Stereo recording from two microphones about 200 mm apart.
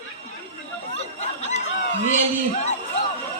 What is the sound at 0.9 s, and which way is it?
Snicker, 35° left (ahead or behind).